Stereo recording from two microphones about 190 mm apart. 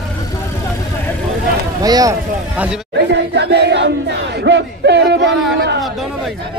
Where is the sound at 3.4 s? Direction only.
60° right (ahead or behind).